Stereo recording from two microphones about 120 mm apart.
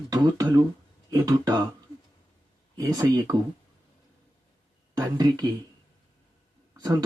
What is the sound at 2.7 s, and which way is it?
Speech, 30° right (ahead or behind).